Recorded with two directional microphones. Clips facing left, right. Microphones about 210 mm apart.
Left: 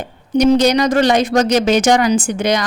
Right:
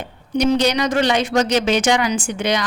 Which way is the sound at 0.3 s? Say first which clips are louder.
Left 5 dB; 45° left (ahead or behind).